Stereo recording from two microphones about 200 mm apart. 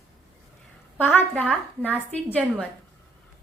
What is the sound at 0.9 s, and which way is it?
A woman's voice, 10° left (ahead or behind).